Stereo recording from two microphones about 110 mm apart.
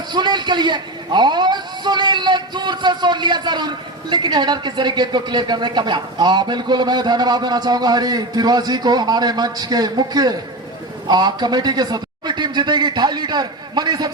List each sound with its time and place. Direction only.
0.1 s a man's voice: 40° right (ahead or behind)